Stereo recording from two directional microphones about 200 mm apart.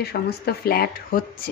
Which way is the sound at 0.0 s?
50° left (ahead or behind).